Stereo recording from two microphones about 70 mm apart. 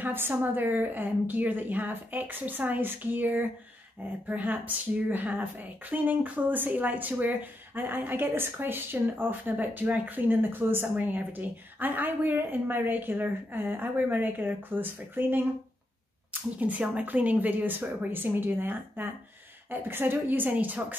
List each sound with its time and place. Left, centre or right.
0.0 s a woman's voice: right
16.5 s speech: right